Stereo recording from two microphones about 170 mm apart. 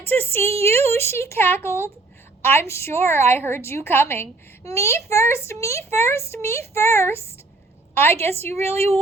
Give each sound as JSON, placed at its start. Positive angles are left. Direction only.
{"t": 0.0, "sound": "a woman's voice", "side_deg": 10}
{"t": 0.5, "sound": "a woman's voice", "side_deg": -35}
{"t": 0.9, "sound": "a woman's voice", "side_deg": 15}
{"t": 8.3, "sound": "a woman's voice", "side_deg": -40}